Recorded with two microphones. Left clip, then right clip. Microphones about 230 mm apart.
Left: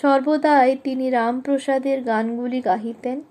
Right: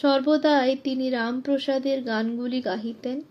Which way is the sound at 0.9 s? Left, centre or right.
Centre.